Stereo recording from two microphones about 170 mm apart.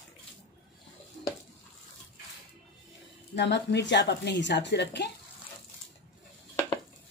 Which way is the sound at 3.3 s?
90° left.